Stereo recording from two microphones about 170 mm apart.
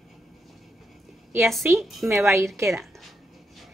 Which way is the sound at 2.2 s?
15° right (ahead or behind).